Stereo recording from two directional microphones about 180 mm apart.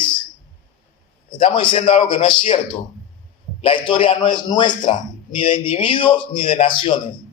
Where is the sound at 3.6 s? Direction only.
30° left (ahead or behind).